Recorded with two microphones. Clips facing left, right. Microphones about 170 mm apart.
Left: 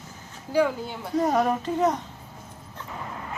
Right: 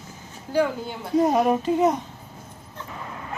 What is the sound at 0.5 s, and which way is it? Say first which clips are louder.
Speech: even; 5° left (ahead or behind).